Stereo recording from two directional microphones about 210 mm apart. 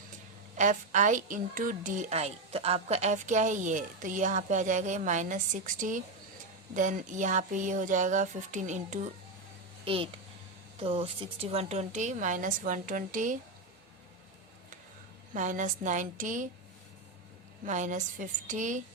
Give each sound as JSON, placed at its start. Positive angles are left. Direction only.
{"t": 0.5, "sound": "a woman's voice", "side_deg": -35}
{"t": 15.4, "sound": "a woman's voice", "side_deg": -35}
{"t": 17.7, "sound": "a woman's voice", "side_deg": -35}